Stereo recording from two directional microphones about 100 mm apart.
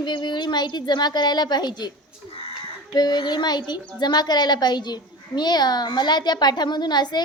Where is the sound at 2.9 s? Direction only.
45° left (ahead or behind).